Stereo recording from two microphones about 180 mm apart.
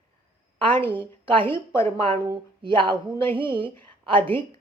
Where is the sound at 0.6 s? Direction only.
30° right (ahead or behind).